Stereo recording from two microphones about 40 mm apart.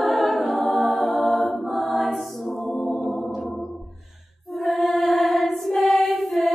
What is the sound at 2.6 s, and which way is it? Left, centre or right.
Music, centre.